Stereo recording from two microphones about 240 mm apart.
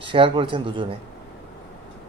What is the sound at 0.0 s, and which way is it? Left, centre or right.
Speech, right.